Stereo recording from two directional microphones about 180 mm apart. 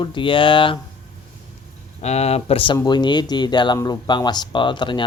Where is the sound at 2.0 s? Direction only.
35° left (ahead or behind).